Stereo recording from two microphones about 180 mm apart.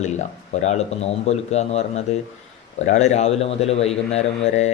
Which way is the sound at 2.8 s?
40° left (ahead or behind).